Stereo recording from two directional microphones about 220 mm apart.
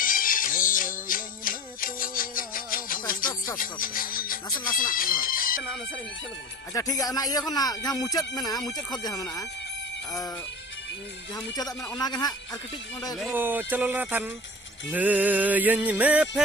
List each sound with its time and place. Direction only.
0.0 s music: 40° left (ahead or behind)
4.5 s speech: 40° left (ahead or behind)
6.7 s speech: 15° left (ahead or behind)
11.9 s a man's voice: 20° left (ahead or behind)
13.3 s music: 10° right (ahead or behind)